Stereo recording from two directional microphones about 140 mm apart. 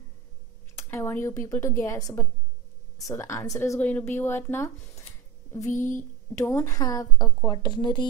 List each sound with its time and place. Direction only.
0.7 s speech: 15° left (ahead or behind)